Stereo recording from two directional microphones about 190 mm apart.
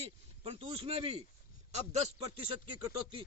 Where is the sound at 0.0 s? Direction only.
30° right (ahead or behind).